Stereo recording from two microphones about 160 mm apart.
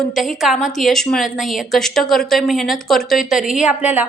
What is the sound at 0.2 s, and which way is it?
A woman's voice, centre (ahead or behind).